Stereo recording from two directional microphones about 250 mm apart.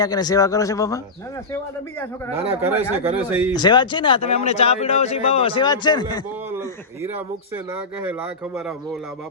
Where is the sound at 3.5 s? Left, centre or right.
Centre.